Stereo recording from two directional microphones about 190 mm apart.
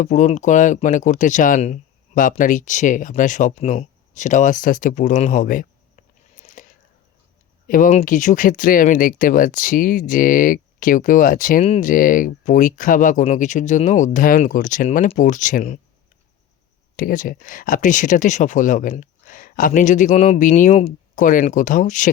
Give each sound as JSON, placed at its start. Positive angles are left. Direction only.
{"t": 0.0, "sound": "speech", "side_deg": 40}
{"t": 7.7, "sound": "speech", "side_deg": 45}
{"t": 17.0, "sound": "speech", "side_deg": 45}